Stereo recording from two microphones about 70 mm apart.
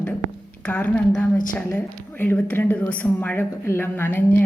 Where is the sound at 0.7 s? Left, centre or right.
Left.